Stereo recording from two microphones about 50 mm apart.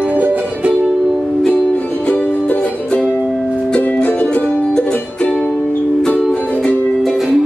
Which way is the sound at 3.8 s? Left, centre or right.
Left.